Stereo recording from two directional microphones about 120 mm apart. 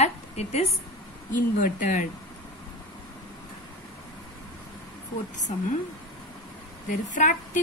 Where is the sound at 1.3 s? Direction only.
90° left.